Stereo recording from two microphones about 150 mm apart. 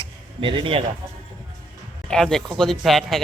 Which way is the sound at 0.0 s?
35° right (ahead or behind).